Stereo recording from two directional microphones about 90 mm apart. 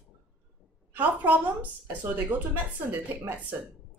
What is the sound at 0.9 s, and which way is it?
Speech, 20° right (ahead or behind).